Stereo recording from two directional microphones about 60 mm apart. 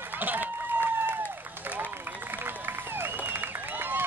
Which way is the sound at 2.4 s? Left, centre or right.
Right.